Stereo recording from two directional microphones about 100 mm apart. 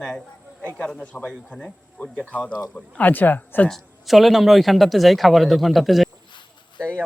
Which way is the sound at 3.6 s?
Centre (ahead or behind).